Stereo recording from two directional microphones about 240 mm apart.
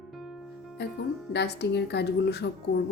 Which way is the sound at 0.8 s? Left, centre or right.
Left.